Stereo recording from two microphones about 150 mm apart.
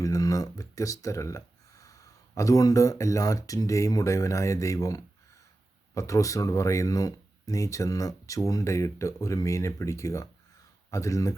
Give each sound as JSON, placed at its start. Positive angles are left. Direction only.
{"t": 0.0, "sound": "speech", "side_deg": 20}